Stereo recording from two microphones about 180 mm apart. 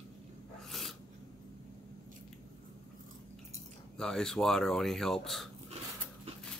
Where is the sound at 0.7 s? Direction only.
Centre (ahead or behind).